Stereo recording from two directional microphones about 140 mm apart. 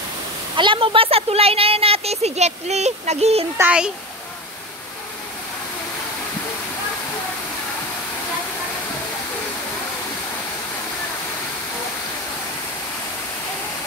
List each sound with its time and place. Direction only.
0.6 s speech: 35° right (ahead or behind)
3.5 s a child's voice: 10° right (ahead or behind)